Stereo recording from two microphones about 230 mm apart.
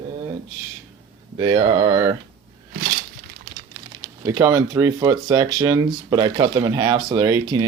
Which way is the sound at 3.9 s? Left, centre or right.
Centre.